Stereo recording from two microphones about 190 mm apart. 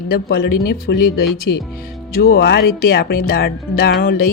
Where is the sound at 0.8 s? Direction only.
55° left (ahead or behind).